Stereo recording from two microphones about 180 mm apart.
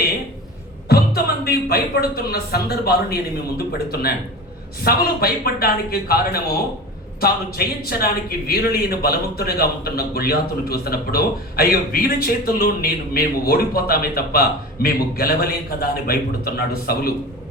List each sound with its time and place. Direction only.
0.9 s a man's voice: 60° left (ahead or behind)